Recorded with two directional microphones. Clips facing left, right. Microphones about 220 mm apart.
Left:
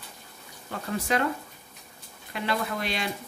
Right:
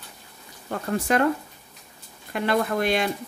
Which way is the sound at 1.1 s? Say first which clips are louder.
Right 5 dB; 50° right (ahead or behind).